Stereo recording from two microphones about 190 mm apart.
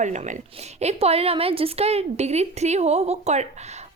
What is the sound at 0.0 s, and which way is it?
A woman's voice, 40° right (ahead or behind).